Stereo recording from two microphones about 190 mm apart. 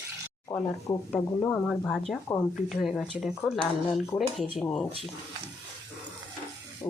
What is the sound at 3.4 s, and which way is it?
Speech, 5° left (ahead or behind).